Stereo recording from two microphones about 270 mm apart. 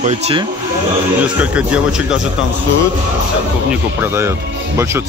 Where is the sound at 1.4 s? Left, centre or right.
Centre.